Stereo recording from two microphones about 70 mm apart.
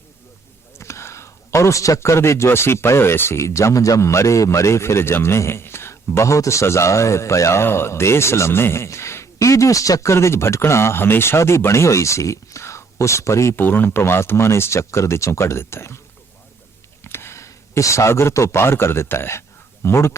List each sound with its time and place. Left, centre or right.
0.8 s speech: left
13.6 s speech: left
17.0 s speech: left